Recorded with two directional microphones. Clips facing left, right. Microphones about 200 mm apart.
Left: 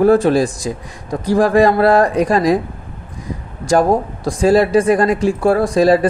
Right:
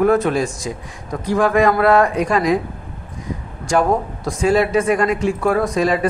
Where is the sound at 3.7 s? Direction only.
35° left (ahead or behind).